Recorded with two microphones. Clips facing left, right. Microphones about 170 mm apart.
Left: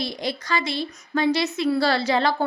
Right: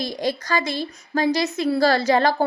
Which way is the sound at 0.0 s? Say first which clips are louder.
Right 3 dB; 45° right (ahead or behind).